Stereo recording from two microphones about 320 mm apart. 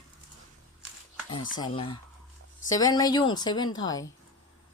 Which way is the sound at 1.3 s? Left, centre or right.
Centre.